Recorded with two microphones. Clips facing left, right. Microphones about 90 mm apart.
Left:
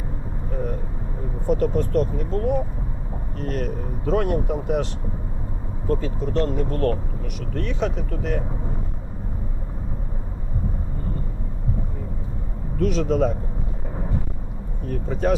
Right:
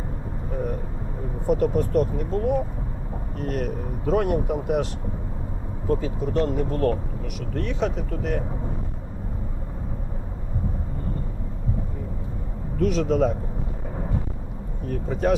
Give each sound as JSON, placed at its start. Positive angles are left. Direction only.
{"t": 1.5, "sound": "speech", "side_deg": -10}
{"t": 5.9, "sound": "speech", "side_deg": -10}
{"t": 12.8, "sound": "speech", "side_deg": 0}
{"t": 14.8, "sound": "speech", "side_deg": 0}